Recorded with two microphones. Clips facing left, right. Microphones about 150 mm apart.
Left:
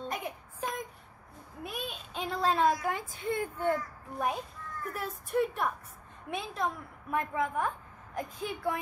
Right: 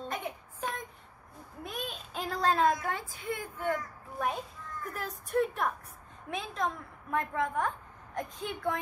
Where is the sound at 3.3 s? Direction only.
30° left (ahead or behind).